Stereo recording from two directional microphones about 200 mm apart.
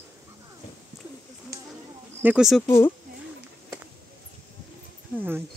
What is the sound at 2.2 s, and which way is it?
Speech, 5° right (ahead or behind).